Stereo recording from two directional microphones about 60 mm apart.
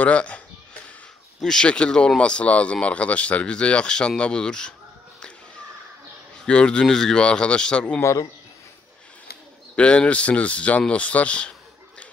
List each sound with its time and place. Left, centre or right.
0.0 s speech: left
1.4 s speech: centre
6.4 s speech: centre
8.0 s speech: left
9.8 s speech: centre